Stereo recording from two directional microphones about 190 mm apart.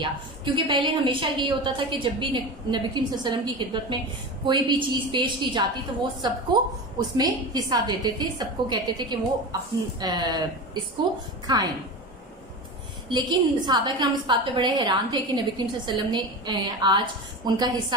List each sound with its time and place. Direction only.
0.0 s a woman's voice: 25° right (ahead or behind)
13.1 s a woman's voice: 25° right (ahead or behind)